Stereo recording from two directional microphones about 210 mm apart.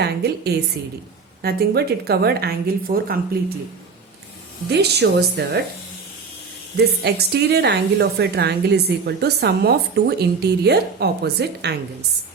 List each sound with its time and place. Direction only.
0.0 s a woman's voice: 50° right (ahead or behind)
4.7 s a woman's voice: 50° right (ahead or behind)
6.7 s a woman's voice: 50° right (ahead or behind)